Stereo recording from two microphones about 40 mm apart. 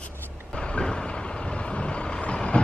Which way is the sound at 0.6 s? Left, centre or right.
Left.